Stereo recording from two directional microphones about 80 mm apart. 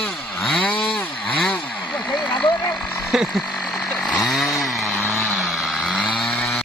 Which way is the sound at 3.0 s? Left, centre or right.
Centre.